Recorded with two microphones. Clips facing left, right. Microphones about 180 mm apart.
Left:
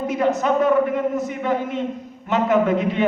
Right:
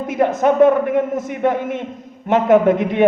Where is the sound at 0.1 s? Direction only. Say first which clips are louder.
Right 4 dB; 50° right (ahead or behind).